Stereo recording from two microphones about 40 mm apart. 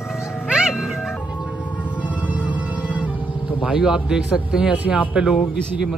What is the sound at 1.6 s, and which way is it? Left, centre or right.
Music, left.